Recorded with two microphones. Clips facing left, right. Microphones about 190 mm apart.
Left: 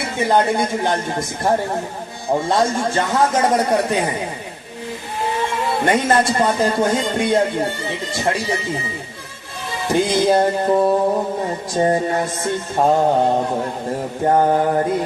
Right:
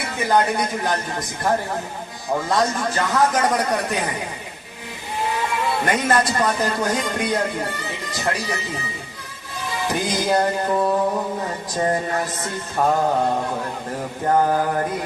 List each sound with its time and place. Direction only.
0.2 s speech: 25° left (ahead or behind)
2.3 s speech: 25° left (ahead or behind)
5.8 s speech: 25° left (ahead or behind)
9.9 s speech: 25° left (ahead or behind)